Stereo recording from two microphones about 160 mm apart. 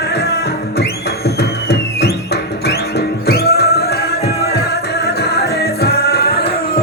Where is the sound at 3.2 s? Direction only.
80° left.